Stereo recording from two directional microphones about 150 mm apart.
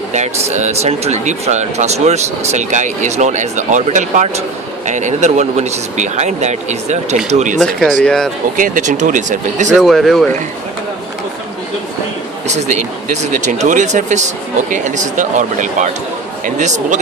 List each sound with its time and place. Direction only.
0.1 s speech: 50° right (ahead or behind)
7.6 s speech: 5° left (ahead or behind)
8.5 s speech: 60° right (ahead or behind)
9.7 s speech: centre (ahead or behind)
12.5 s speech: 50° right (ahead or behind)